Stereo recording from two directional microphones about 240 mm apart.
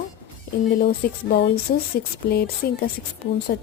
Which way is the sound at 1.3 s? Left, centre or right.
Left.